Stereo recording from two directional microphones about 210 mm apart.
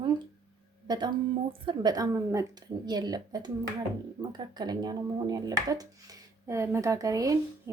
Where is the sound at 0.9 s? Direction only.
20° right (ahead or behind).